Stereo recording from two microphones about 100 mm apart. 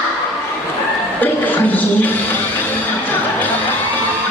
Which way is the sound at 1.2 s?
15° left (ahead or behind).